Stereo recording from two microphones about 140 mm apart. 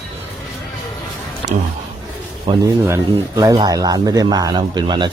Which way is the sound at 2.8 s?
20° right (ahead or behind).